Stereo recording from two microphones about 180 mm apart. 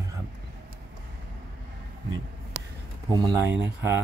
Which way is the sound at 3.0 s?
20° right (ahead or behind).